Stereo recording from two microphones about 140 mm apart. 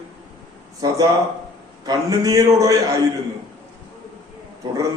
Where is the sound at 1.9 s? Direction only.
25° right (ahead or behind).